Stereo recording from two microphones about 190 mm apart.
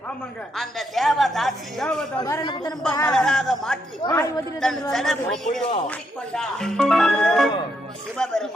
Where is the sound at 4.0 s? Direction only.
15° left (ahead or behind).